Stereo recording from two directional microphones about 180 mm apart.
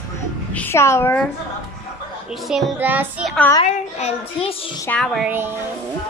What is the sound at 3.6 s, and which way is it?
A child's voice, 35° left (ahead or behind).